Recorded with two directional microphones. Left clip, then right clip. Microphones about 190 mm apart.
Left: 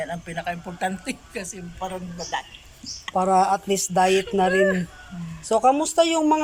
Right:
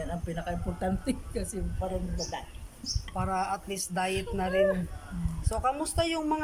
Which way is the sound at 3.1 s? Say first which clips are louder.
Left 13 dB; 25° left (ahead or behind).